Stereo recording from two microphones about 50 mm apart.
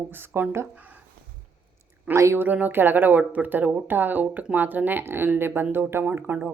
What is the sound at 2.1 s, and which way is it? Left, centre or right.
A woman's voice, right.